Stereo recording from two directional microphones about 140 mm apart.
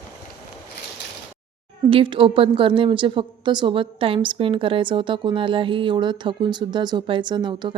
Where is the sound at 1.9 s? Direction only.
40° right (ahead or behind).